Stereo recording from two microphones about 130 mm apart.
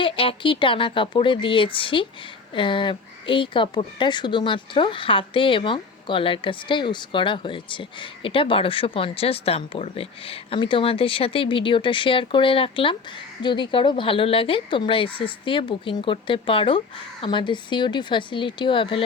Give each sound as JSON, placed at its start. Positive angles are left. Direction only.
{"t": 0.0, "sound": "a woman's voice", "side_deg": 45}